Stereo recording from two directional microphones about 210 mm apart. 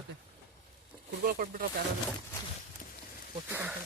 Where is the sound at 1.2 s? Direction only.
40° right (ahead or behind).